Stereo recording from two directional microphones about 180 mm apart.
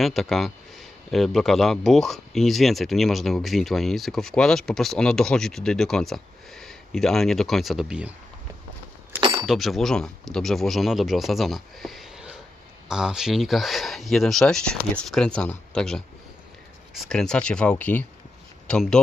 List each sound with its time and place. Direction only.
0.0 s a man's voice: centre (ahead or behind)
9.2 s a sound: 25° right (ahead or behind)
9.5 s a man's voice: centre (ahead or behind)